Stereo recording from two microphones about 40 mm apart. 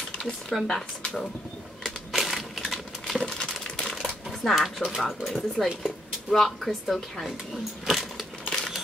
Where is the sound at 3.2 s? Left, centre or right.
Centre.